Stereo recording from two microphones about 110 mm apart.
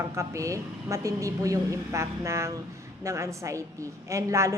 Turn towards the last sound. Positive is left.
turn(degrees=-30)  # may be behind; listen again after turning